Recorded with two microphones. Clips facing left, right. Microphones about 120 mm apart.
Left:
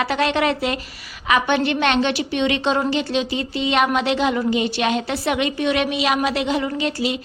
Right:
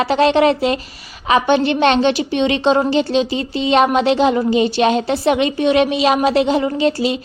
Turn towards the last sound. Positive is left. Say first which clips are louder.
# right 6 dB
turn(degrees=-30)  # may be behind; listen again after turning